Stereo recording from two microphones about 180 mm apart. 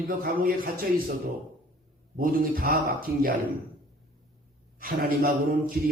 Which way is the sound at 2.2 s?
55° right (ahead or behind).